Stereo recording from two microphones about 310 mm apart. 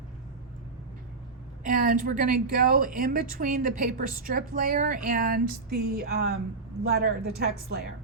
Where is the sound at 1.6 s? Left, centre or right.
Right.